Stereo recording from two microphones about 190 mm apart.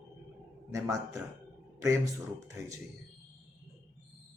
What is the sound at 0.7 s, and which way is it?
Speech, 15° right (ahead or behind).